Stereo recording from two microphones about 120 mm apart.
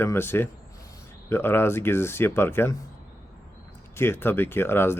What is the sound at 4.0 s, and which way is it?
A man's voice, 20° left (ahead or behind).